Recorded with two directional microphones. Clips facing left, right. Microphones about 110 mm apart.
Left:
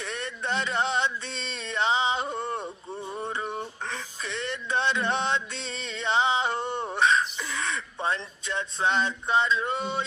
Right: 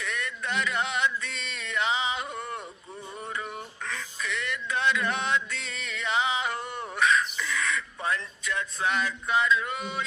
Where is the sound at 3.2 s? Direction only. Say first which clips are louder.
Left 3 dB; 30° left (ahead or behind).